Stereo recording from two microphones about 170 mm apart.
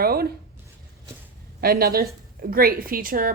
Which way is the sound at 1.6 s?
60° right (ahead or behind).